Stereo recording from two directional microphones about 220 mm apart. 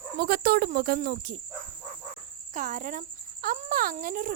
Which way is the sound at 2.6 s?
35° right (ahead or behind).